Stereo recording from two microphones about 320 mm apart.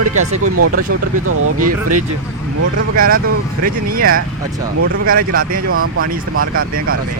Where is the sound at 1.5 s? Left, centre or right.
Right.